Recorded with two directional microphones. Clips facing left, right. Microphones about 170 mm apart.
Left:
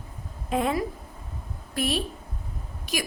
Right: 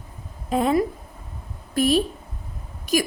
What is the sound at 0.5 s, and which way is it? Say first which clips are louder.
A woman's voice: right 5 dB; 40° right (ahead or behind).